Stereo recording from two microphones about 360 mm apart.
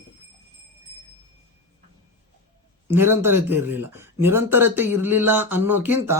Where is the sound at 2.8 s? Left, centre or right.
Centre.